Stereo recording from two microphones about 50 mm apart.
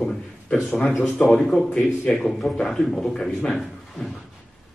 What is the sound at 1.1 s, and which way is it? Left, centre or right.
Speech, centre.